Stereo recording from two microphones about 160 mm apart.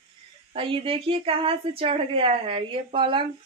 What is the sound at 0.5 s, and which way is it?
A woman's voice, 35° right (ahead or behind).